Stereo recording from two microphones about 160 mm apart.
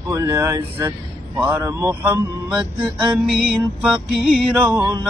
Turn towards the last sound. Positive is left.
turn(degrees=-10)  # may be behind; listen again after turning